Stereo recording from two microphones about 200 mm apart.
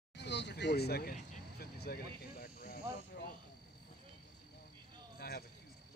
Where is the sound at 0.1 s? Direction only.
60° left (ahead or behind).